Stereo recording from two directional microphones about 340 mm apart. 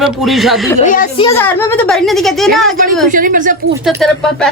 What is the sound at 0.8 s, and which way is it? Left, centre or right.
Speech, left.